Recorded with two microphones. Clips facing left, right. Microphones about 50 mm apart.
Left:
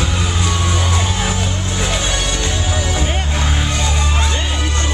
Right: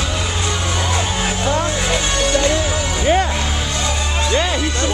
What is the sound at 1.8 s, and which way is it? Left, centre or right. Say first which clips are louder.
Music: right 2 dB; centre.